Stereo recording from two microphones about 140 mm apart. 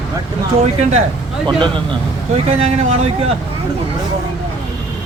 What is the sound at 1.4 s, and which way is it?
Speech, 35° right (ahead or behind).